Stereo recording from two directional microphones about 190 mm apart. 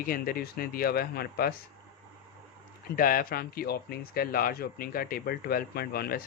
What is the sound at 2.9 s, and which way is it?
Speech, 50° left (ahead or behind).